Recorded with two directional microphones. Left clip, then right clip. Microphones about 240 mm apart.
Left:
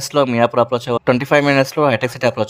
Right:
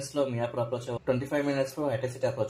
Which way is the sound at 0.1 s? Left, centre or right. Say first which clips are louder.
Left 15 dB; left.